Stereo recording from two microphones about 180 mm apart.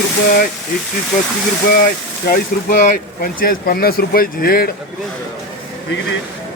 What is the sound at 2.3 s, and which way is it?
Speech, 50° left (ahead or behind).